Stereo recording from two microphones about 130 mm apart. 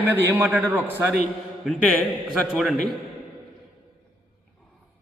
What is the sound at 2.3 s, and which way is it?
Speech, 5° right (ahead or behind).